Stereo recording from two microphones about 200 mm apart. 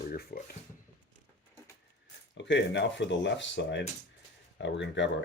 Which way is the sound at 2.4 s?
65° left (ahead or behind).